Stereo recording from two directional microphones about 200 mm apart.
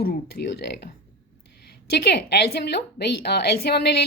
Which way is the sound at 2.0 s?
55° left (ahead or behind).